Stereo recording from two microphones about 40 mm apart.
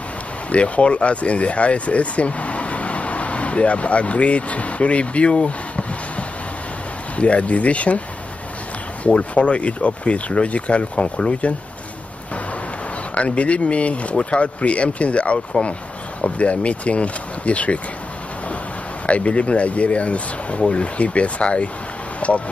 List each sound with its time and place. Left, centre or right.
0.5 s speech: left
9.0 s speech: left
13.1 s speech: left
19.0 s speech: left